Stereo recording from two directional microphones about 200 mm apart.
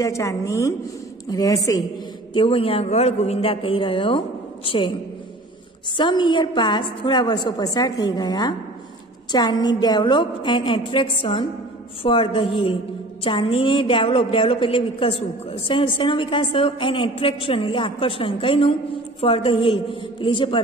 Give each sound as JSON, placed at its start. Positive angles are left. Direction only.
{"t": 0.0, "sound": "a woman's voice", "side_deg": 15}
{"t": 5.9, "sound": "a woman's voice", "side_deg": 25}